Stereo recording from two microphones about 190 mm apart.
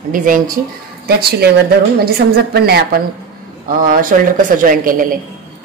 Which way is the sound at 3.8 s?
45° right (ahead or behind).